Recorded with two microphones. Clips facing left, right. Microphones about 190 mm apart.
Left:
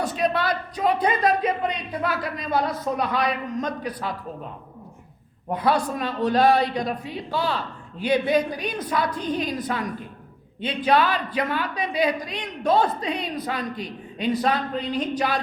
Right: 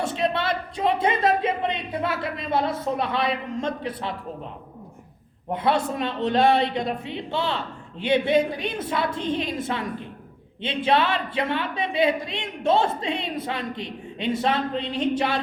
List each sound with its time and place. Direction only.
0.0 s a woman's voice: 25° right (ahead or behind)
5.5 s a woman's voice: 25° right (ahead or behind)